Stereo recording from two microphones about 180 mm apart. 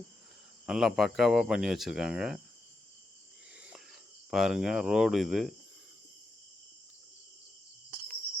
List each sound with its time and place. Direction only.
0.6 s speech: centre (ahead or behind)
4.3 s speech: centre (ahead or behind)